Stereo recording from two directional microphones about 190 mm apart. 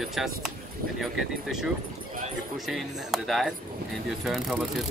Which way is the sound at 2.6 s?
Centre (ahead or behind).